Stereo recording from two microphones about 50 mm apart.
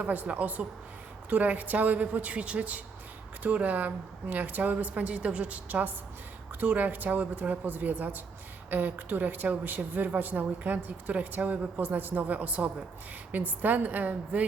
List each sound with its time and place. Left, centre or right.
0.0 s a woman's voice: right